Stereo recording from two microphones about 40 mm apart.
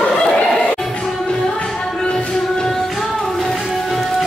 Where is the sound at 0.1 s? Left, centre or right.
Centre.